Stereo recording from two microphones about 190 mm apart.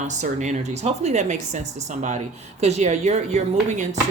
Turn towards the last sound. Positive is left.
turn(degrees=-40)  # may be behind; listen again after turning